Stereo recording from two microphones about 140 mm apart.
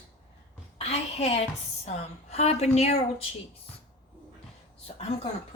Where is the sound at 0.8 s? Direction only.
45° left (ahead or behind).